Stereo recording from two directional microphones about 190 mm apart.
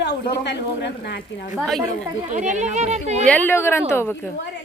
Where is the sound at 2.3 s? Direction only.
40° right (ahead or behind).